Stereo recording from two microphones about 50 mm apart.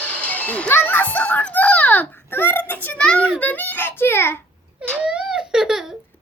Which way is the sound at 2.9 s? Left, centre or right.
Centre.